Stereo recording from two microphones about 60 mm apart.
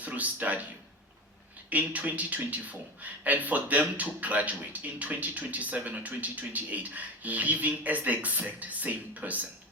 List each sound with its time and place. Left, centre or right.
0.0 s speech: right
1.7 s a man's voice: right